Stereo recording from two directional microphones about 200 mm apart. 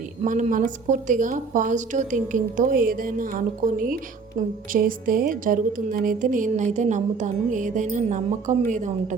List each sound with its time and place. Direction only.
0.2 s a woman's voice: 35° right (ahead or behind)